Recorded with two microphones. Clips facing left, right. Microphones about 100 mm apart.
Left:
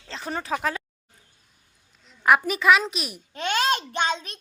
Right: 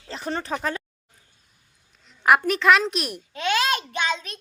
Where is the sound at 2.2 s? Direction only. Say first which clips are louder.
Right 1 dB; centre (ahead or behind).